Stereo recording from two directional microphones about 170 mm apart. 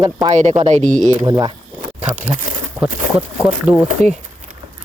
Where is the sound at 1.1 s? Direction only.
25° right (ahead or behind).